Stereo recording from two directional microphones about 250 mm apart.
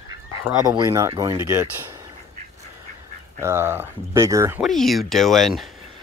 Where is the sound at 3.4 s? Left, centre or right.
Centre.